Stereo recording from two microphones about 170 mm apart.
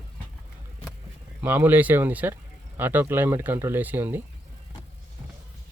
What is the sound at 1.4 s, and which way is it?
Speech, 10° right (ahead or behind).